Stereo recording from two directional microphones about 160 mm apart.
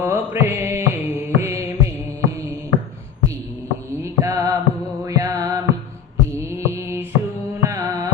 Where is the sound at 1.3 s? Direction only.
15° right (ahead or behind).